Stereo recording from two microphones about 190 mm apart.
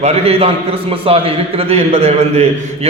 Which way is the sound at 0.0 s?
35° right (ahead or behind).